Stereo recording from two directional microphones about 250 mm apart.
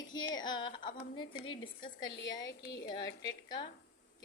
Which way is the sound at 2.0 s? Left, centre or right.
Left.